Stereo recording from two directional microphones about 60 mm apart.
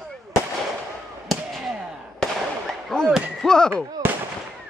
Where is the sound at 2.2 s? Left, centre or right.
Centre.